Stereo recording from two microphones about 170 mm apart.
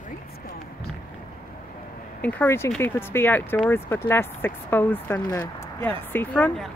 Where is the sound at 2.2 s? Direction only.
10° left (ahead or behind).